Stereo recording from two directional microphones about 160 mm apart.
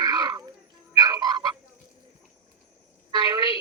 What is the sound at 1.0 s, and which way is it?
Frog, 25° right (ahead or behind).